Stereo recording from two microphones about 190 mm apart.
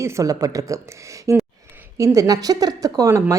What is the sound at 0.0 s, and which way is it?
Speech, 20° right (ahead or behind).